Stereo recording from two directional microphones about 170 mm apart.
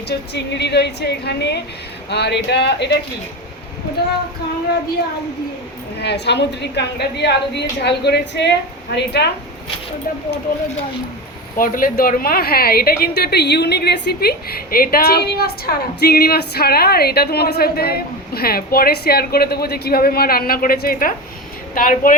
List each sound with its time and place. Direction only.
0.1 s a woman's voice: 85° left
6.0 s a woman's voice: 80° left
9.0 s a woman's voice: 80° left
11.5 s a woman's voice: 55° left (ahead or behind)